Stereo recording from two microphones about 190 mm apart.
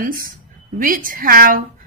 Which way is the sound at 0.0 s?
50° right (ahead or behind).